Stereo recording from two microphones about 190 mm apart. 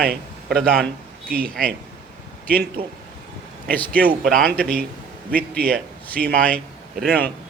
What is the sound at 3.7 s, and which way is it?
Speech, 10° left (ahead or behind).